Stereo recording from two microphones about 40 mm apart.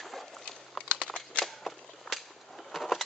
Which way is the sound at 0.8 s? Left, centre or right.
Left.